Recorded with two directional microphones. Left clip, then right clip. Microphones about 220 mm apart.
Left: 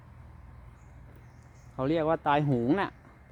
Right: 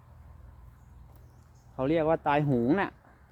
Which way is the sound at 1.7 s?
5° left (ahead or behind).